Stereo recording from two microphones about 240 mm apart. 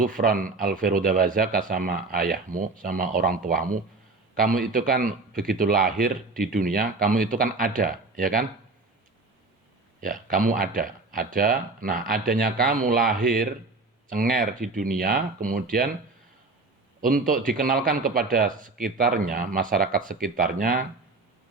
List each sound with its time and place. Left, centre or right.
0.2 s a man's voice: right
10.0 s a man's voice: right
17.0 s a man's voice: right